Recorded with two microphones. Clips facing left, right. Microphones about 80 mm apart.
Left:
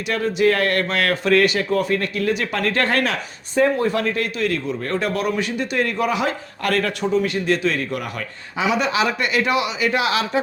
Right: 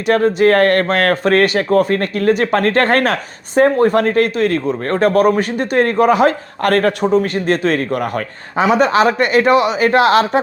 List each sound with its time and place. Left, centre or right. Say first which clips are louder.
0.1 s speech: right 7 dB; right